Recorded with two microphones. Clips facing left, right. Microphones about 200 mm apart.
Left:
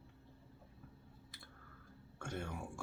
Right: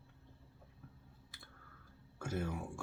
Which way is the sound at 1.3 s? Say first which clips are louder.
Right 1 dB; centre (ahead or behind).